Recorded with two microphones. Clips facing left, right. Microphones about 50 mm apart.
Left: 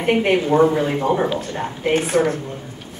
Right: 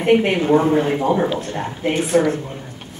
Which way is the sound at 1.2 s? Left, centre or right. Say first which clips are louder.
Even; centre.